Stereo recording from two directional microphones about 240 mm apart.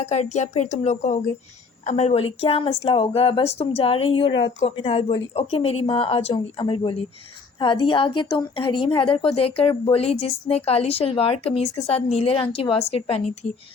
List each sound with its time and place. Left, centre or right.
0.0 s a woman's voice: left